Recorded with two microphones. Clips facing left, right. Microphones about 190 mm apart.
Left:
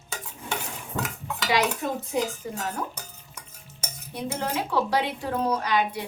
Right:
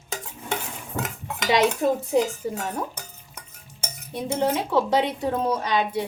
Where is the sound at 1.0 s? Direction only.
20° right (ahead or behind).